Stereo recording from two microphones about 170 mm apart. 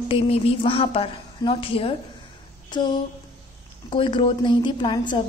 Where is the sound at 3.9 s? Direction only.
30° left (ahead or behind).